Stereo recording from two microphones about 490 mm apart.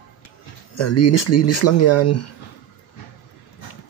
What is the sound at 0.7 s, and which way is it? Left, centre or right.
Speech, left.